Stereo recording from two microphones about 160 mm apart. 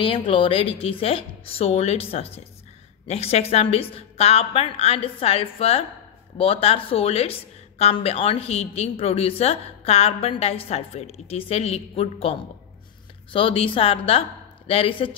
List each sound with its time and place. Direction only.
0.0 s a woman's voice: 35° left (ahead or behind)